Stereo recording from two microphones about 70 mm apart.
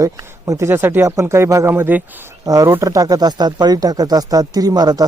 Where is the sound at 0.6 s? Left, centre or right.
Right.